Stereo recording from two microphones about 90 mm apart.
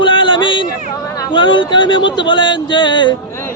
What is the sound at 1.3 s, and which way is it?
Speech, 65° left (ahead or behind).